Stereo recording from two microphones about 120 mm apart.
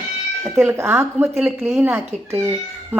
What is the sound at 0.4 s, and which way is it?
Speech, 20° right (ahead or behind).